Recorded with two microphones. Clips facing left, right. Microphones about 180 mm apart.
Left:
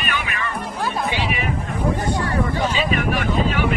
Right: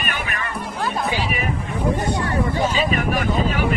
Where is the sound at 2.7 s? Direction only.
45° right (ahead or behind).